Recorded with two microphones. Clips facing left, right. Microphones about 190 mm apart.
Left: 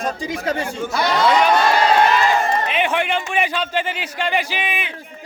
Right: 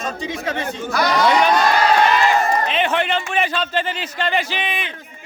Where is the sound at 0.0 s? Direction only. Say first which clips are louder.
Left 2 dB; 35° left (ahead or behind).